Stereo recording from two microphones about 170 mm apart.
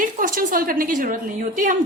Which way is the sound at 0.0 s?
55° right (ahead or behind).